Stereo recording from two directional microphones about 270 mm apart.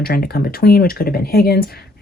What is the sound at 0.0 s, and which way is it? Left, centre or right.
Speech, left.